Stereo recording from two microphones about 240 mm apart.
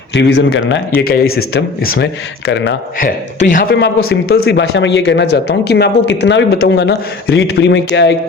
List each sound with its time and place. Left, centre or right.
0.1 s speech: left
1.8 s speech: left
3.0 s speech: left